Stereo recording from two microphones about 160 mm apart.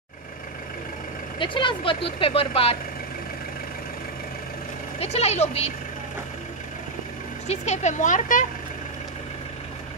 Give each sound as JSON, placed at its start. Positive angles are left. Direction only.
{"t": 1.4, "sound": "speech", "side_deg": 30}
{"t": 5.0, "sound": "speech", "side_deg": 40}
{"t": 7.4, "sound": "speech", "side_deg": 45}